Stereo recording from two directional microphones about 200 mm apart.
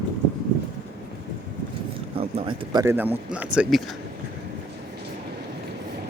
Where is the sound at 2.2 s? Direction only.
25° right (ahead or behind); by 3.5 s 10° right (ahead or behind).